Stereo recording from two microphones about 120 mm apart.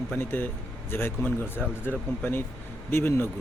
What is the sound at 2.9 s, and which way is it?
Speech, 20° left (ahead or behind).